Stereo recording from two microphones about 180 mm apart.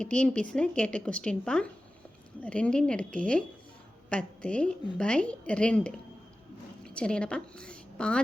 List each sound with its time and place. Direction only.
0.0 s a woman's voice: 5° left (ahead or behind)